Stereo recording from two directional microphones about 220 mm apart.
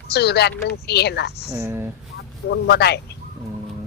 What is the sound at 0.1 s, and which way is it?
Speech, 50° left (ahead or behind).